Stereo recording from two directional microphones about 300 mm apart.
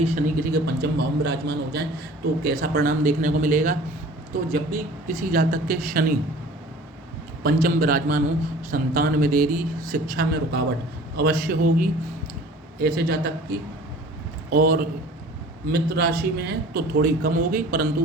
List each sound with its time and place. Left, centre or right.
0.0 s a man's voice: right
7.4 s a man's voice: right
14.5 s a man's voice: right